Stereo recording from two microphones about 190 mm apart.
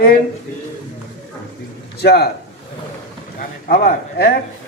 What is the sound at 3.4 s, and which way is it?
Speech, 50° left (ahead or behind).